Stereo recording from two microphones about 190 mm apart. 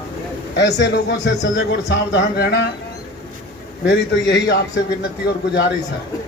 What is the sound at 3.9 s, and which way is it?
A man's voice, 65° left (ahead or behind).